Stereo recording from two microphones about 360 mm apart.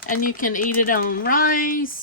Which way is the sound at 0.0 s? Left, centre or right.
Left.